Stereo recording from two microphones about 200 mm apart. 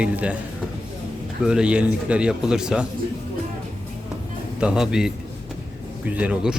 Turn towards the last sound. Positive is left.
turn(degrees=-5)  # may be behind; listen again after turning